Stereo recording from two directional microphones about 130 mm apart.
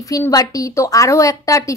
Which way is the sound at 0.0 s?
25° left (ahead or behind).